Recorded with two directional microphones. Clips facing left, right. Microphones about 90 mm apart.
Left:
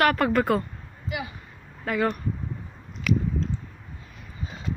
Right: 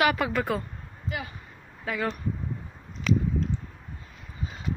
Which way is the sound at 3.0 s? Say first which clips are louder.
Even; 30° right (ahead or behind).